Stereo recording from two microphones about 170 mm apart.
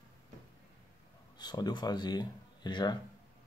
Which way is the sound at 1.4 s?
25° left (ahead or behind).